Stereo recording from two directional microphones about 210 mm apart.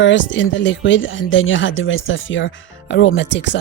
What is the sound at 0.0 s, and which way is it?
Speech, 60° left (ahead or behind).